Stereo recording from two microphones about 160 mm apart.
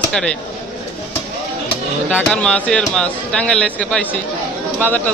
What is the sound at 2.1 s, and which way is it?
Speech, 5° left (ahead or behind).